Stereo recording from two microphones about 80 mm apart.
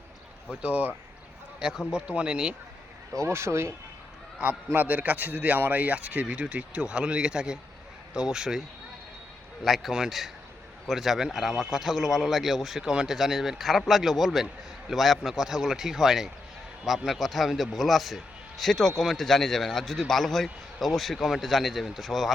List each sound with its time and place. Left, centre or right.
0.5 s speech: centre
3.2 s speech: right
4.4 s a man's voice: right
9.6 s a man's voice: centre